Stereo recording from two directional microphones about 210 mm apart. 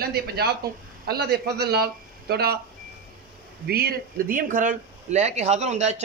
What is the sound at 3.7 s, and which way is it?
A man's voice, 45° right (ahead or behind).